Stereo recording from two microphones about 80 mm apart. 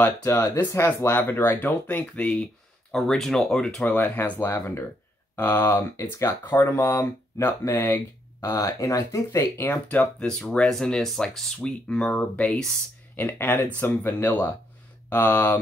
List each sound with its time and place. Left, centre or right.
0.2 s speech: left
1.1 s speech: left
2.9 s speech: centre
3.8 s speech: left
9.7 s speech: centre
13.1 s speech: left